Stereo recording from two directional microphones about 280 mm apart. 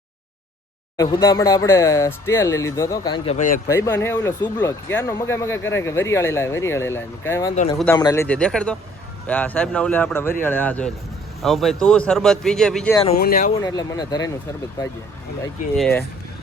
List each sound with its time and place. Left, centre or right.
0.9 s speech: centre
3.3 s speech: left
3.7 s a man's voice: centre
13.1 s speech: left
13.6 s speech: centre
15.8 s speech: centre